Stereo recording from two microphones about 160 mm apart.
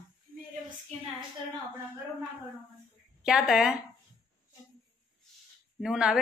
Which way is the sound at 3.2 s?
5° right (ahead or behind).